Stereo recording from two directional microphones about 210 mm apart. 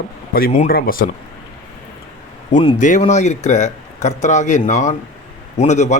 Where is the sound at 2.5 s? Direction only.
35° left (ahead or behind).